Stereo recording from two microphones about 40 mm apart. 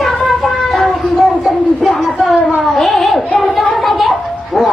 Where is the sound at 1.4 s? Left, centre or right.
Centre.